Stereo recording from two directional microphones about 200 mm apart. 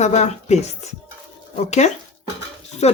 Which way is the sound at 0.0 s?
35° left (ahead or behind).